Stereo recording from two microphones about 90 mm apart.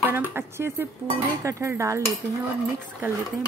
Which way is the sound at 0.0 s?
20° right (ahead or behind).